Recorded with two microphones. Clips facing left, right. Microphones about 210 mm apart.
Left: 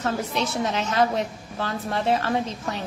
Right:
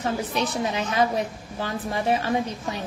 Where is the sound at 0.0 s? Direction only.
15° right (ahead or behind).